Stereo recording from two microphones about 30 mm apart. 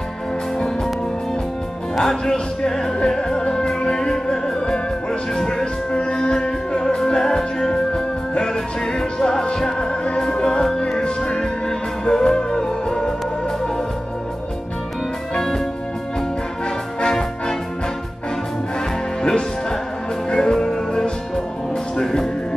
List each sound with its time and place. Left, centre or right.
2.0 s music: centre
5.9 s music: left
15.3 s music: centre
19.2 s music: left